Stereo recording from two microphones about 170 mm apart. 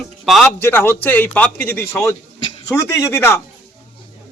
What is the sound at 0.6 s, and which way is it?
A man's voice, 15° left (ahead or behind).